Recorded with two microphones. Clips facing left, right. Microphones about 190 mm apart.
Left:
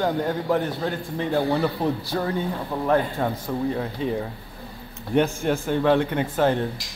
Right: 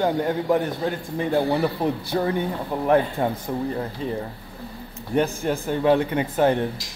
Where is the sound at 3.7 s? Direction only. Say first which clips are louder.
Left 2 dB; centre (ahead or behind).